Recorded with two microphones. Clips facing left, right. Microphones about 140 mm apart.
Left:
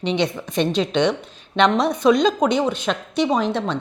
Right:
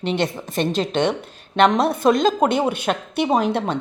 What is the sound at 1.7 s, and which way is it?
Speech, 5° right (ahead or behind).